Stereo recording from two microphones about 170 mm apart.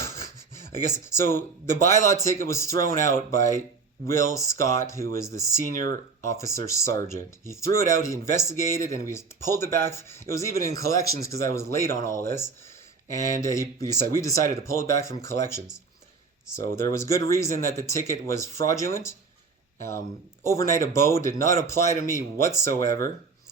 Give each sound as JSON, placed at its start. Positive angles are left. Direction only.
{"t": 0.9, "sound": "speech", "side_deg": 15}
{"t": 16.9, "sound": "speech", "side_deg": 15}
{"t": 20.4, "sound": "speech", "side_deg": 15}